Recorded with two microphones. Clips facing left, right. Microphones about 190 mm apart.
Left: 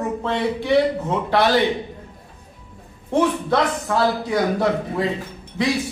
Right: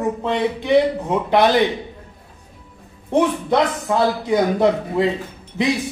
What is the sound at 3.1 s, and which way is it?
Speech, 20° right (ahead or behind).